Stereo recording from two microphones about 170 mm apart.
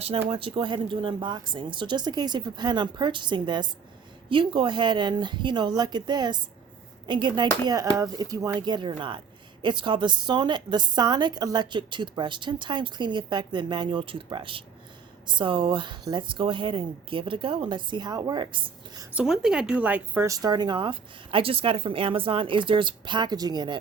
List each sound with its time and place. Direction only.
0.3 s speech: 30° right (ahead or behind)
19.1 s speech: 5° right (ahead or behind); by 23.8 s 25° right (ahead or behind)